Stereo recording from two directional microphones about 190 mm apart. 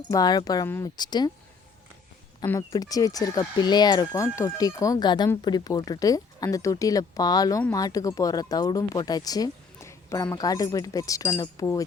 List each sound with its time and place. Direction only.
0.1 s speech: 20° left (ahead or behind)
2.5 s speech: 20° left (ahead or behind)